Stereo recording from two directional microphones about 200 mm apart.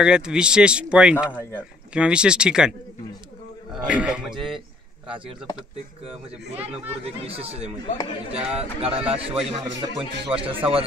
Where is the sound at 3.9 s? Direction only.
5° right (ahead or behind).